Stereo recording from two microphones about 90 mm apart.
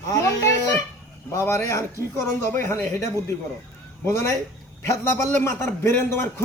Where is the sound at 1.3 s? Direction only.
35° left (ahead or behind).